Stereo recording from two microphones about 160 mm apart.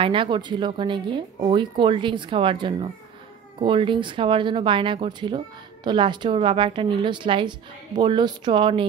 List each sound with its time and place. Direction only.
0.0 s a woman's voice: 30° right (ahead or behind)